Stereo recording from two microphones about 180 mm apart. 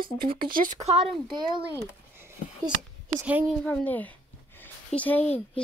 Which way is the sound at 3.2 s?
5° right (ahead or behind).